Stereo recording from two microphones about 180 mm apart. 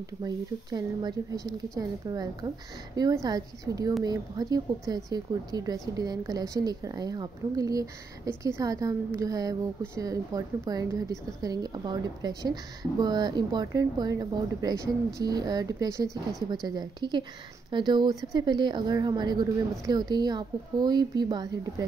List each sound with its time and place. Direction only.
0.2 s speech: 20° right (ahead or behind)